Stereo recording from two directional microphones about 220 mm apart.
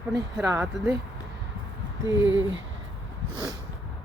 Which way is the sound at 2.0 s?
15° right (ahead or behind).